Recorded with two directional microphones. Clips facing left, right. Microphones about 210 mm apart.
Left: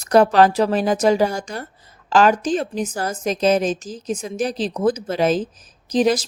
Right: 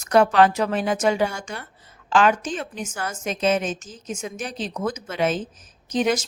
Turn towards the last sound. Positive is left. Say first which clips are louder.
# left 4 dB
turn(degrees=35)  # may be behind; listen again after turning